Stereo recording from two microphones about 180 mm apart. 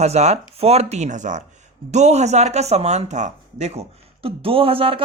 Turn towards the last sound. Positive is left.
turn(degrees=-30)  # may be behind; listen again after turning